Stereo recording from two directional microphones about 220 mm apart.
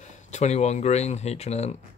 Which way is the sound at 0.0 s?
30° left (ahead or behind).